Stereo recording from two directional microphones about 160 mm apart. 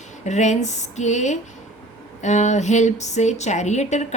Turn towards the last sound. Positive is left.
turn(degrees=45)  # may be behind; listen again after turning